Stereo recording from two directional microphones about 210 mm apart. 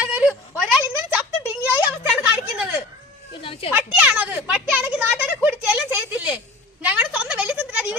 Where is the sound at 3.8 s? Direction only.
5° right (ahead or behind).